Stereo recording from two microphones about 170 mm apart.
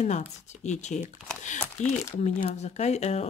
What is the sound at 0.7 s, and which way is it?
Speech, 45° left (ahead or behind).